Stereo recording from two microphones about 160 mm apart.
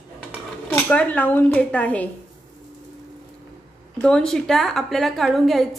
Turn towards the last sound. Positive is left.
turn(degrees=0)  # may be behind; listen again after turning